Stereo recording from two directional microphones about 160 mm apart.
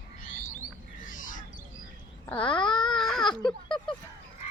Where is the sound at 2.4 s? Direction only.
30° left (ahead or behind).